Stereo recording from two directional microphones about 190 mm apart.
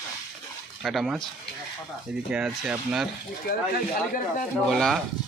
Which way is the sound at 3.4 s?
55° left (ahead or behind).